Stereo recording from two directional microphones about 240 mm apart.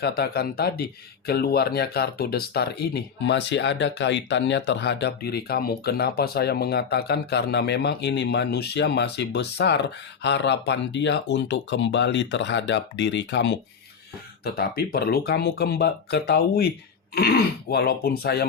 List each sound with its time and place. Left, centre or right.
0.0 s speech: left